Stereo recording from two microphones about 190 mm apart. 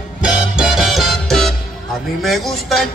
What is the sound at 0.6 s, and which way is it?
Music, centre (ahead or behind).